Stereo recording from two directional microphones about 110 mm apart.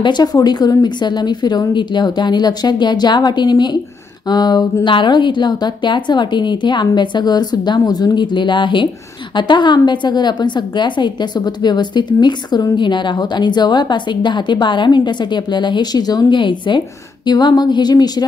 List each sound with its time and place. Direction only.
0.0 s a woman's voice: 40° left (ahead or behind)